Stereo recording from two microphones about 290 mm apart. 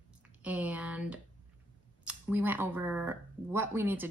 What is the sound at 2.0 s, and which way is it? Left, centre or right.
Speech, centre.